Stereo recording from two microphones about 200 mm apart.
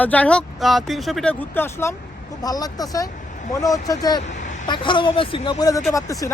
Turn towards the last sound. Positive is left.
turn(degrees=15)  # may be behind; listen again after turning